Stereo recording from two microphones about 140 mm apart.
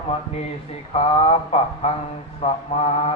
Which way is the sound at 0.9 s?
45° left (ahead or behind).